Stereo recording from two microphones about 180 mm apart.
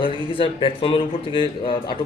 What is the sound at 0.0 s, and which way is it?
Speech, 30° left (ahead or behind).